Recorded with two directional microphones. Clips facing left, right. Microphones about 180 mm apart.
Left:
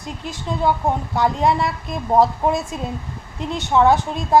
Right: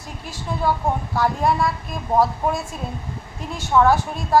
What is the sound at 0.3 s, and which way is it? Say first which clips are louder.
A woman's voice: left 2 dB; 20° left (ahead or behind).